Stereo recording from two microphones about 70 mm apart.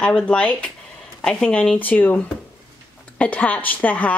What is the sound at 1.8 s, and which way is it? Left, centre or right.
Speech, left.